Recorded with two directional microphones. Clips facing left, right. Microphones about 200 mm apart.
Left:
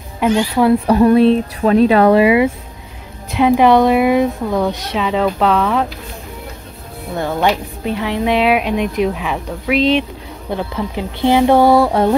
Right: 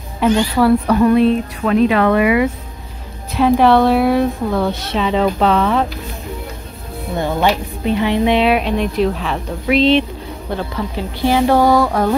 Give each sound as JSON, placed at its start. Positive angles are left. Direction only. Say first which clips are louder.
{"t": 0.2, "sound": "a woman's voice", "louder": "even", "side_deg": 15}
{"t": 3.3, "sound": "a woman's voice", "louder": "left 1 dB", "side_deg": 15}
{"t": 7.2, "sound": "a woman's voice", "louder": "even", "side_deg": 5}